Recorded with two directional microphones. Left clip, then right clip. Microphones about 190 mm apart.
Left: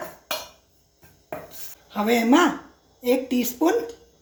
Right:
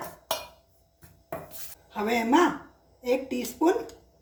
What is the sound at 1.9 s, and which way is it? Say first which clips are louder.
A woman's voice: left 5 dB; 35° left (ahead or behind).